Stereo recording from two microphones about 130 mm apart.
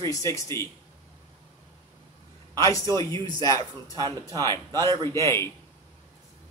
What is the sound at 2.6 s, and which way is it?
A man's voice, 25° left (ahead or behind).